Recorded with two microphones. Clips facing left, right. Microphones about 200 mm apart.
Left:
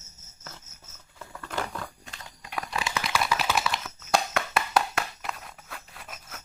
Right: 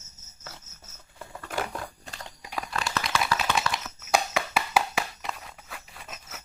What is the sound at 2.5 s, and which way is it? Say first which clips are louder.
Typewriter: even; centre (ahead or behind).